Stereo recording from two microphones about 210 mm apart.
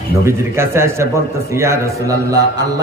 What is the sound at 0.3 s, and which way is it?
A woman's voice, 10° right (ahead or behind).